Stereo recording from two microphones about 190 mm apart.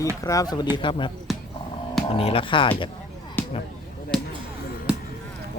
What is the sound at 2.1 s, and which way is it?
Speech, 30° left (ahead or behind).